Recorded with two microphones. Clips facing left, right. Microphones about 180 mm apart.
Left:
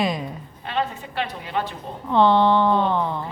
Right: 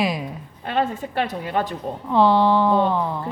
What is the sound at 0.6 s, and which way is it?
Speech, 45° right (ahead or behind).